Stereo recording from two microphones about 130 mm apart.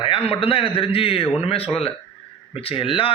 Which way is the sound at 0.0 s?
45° left (ahead or behind).